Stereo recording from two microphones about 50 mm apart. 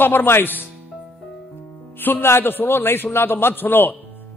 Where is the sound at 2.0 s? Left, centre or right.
Left.